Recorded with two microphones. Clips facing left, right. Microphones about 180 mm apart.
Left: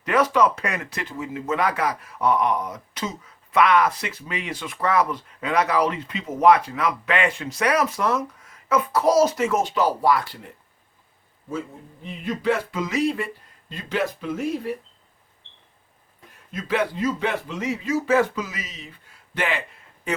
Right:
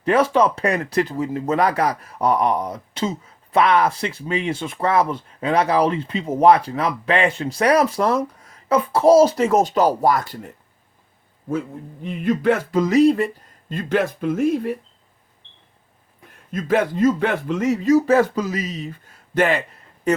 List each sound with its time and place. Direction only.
0.0 s speech: 30° right (ahead or behind); by 10.5 s 45° right (ahead or behind)
12.0 s speech: 55° right (ahead or behind)
16.5 s speech: 50° right (ahead or behind)